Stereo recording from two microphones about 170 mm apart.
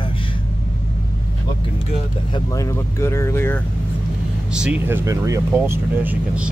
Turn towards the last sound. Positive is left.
turn(degrees=-10)  # may be behind; listen again after turning